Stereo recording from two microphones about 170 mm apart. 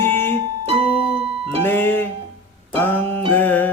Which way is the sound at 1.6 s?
10° left (ahead or behind).